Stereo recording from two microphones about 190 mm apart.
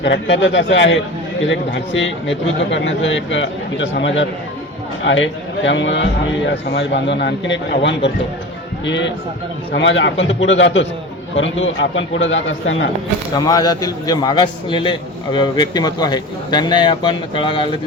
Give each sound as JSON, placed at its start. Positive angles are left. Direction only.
{"t": 0.0, "sound": "a man's voice", "side_deg": 70}
{"t": 13.3, "sound": "a man's voice", "side_deg": 20}